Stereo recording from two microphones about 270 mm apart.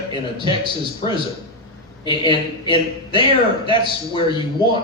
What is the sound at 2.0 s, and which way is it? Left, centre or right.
Speech, centre.